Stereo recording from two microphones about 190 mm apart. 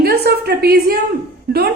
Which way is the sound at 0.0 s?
60° right (ahead or behind).